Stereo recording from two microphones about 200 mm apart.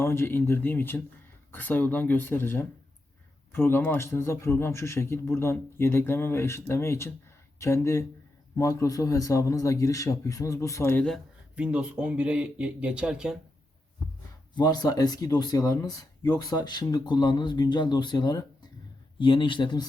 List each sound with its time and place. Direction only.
0.0 s a man's voice: 10° left (ahead or behind); by 13.3 s 5° right (ahead or behind)
14.5 s speech: 20° left (ahead or behind)